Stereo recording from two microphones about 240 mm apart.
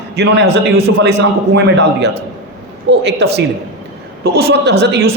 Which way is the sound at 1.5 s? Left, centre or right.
Right.